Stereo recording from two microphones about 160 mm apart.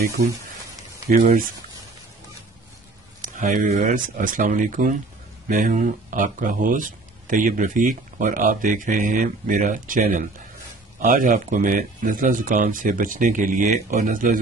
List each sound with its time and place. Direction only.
1.1 s speech: 60° right (ahead or behind)
3.2 s speech: 50° right (ahead or behind)